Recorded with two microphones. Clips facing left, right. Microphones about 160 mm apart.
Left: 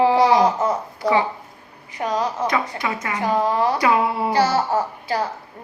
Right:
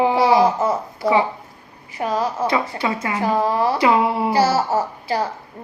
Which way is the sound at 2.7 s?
30° right (ahead or behind).